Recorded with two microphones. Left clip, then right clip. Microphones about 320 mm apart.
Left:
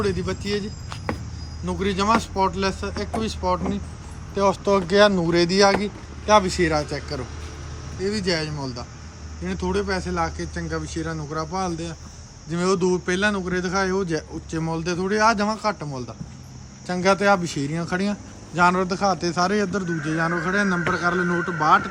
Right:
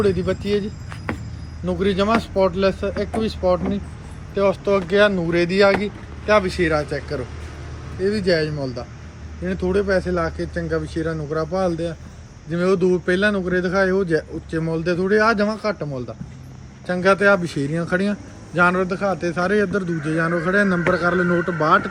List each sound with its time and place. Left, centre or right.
0.3 s speech: centre
4.4 s speech: centre
8.0 s speech: centre